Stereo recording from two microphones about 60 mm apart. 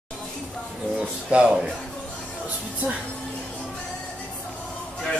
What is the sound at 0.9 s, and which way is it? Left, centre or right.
Speech, centre.